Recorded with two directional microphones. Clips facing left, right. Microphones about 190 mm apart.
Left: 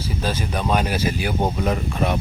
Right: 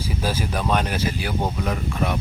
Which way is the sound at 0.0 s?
10° right (ahead or behind).